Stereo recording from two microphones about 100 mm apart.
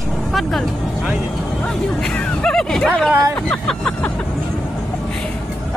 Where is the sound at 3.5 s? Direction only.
10° left (ahead or behind).